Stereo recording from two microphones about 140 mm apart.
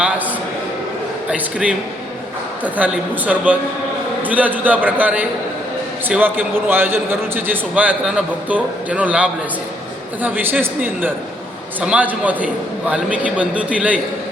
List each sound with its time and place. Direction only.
1.3 s a man's voice: 10° right (ahead or behind)
2.7 s a man's voice: 10° right (ahead or behind)